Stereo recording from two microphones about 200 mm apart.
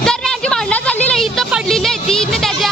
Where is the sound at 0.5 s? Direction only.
5° left (ahead or behind).